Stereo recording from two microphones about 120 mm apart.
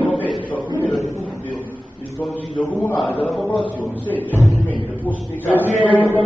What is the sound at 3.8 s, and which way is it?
A man's voice, 15° left (ahead or behind).